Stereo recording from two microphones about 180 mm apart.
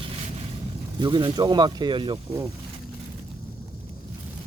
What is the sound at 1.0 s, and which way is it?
Speech, 25° right (ahead or behind).